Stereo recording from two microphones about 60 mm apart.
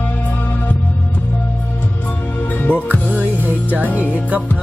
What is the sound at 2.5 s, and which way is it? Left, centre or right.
Music, left.